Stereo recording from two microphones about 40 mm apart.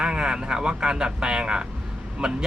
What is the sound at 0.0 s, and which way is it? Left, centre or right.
Speech, right.